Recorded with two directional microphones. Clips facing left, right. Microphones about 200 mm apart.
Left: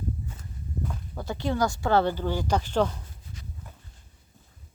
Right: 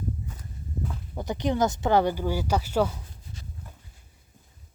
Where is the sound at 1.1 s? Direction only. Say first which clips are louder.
Right 3 dB; 20° right (ahead or behind).